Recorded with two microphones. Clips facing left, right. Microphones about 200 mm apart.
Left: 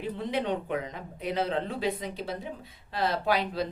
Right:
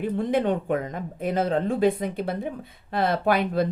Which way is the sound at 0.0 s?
50° right (ahead or behind).